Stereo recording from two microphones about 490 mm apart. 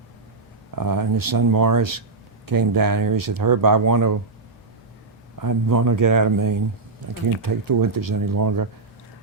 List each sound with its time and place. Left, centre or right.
0.8 s speech: right
5.4 s speech: right